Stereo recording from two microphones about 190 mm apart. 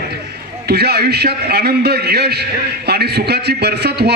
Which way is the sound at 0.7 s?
60° right (ahead or behind).